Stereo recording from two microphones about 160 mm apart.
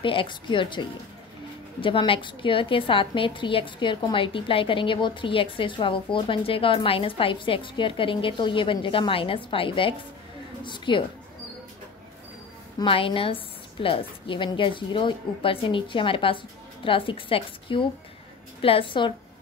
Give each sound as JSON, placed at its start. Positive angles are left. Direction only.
{"t": 0.0, "sound": "a woman's voice", "side_deg": 30}
{"t": 12.7, "sound": "a woman's voice", "side_deg": 35}